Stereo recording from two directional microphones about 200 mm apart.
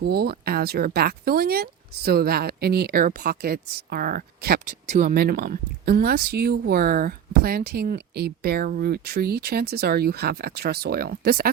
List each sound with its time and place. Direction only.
0.0 s speech: 55° right (ahead or behind)